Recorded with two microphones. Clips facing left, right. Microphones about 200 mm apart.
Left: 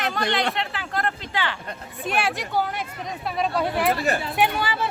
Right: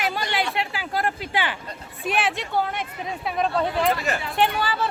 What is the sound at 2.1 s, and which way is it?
Speech, centre (ahead or behind).